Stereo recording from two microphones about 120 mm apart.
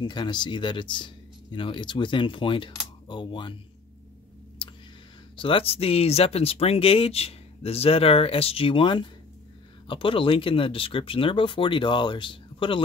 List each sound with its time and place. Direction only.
0.0 s speech: 40° left (ahead or behind)
5.3 s speech: 45° left (ahead or behind)